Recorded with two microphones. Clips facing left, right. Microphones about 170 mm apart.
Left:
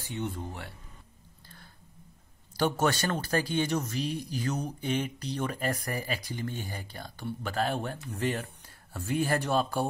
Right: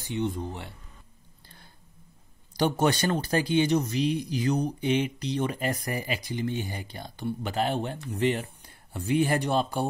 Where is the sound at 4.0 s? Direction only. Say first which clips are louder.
Right 6 dB; 45° left (ahead or behind).